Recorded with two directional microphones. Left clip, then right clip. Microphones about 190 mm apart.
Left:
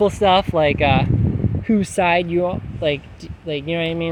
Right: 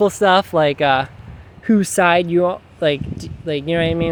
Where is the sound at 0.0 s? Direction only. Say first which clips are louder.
Right 1 dB; 30° right (ahead or behind).